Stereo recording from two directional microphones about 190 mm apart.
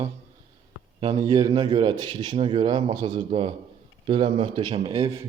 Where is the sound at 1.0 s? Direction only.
20° right (ahead or behind).